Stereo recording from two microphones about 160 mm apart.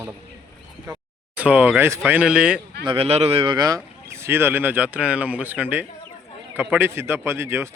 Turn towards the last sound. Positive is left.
turn(degrees=-15)  # may be behind; listen again after turning